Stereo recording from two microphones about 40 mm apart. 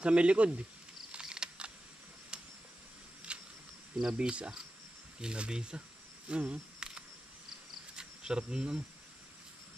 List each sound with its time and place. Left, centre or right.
0.0 s speech: right
1.2 s camera: centre
2.3 s a sound: right
4.1 s speech: right
7.9 s cricket: centre